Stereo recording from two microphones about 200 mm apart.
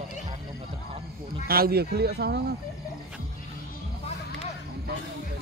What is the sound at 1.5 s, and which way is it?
Speech, 50° right (ahead or behind).